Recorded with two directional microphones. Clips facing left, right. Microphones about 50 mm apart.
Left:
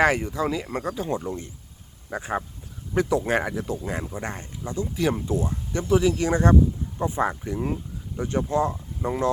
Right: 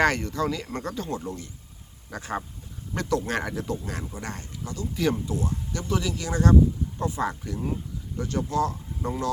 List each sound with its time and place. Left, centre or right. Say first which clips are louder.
0.0 s speech: left 2 dB; centre
1.1 s speech: left 4 dB; left
3.5 s speech: left 1 dB; centre
3.8 s speech: left 4 dB; left